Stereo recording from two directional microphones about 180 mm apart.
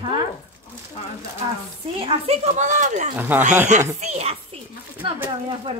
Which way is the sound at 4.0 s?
35° right (ahead or behind).